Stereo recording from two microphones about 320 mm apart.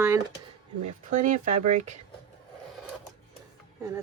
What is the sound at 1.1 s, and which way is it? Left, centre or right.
Speech, right.